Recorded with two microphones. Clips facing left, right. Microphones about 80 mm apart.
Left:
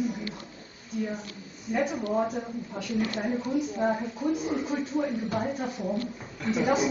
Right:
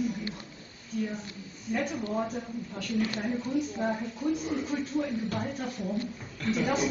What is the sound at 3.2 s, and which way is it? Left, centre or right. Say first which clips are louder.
A woman's voice: left 2 dB; centre.